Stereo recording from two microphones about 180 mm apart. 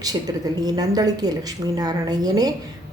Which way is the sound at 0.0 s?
20° right (ahead or behind).